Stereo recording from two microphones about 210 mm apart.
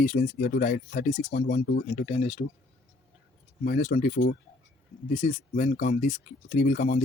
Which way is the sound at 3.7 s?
40° left (ahead or behind).